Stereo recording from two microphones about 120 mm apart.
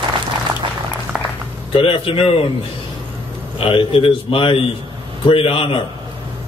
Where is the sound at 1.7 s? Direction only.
50° left (ahead or behind).